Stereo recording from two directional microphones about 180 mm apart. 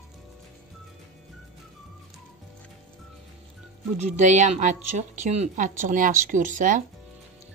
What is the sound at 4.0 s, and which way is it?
A woman's voice, 40° right (ahead or behind).